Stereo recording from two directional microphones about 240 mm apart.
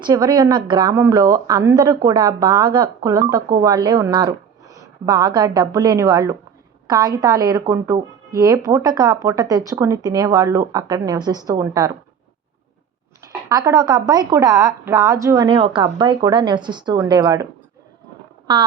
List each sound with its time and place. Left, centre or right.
0.0 s speech: centre
13.5 s speech: centre
18.5 s speech: centre